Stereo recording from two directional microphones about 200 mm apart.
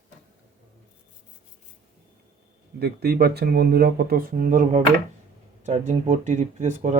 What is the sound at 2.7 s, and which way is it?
Speech, 50° right (ahead or behind).